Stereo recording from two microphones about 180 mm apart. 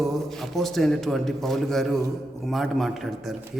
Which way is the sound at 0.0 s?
Centre (ahead or behind).